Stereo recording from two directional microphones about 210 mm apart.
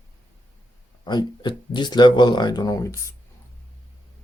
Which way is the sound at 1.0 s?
20° left (ahead or behind).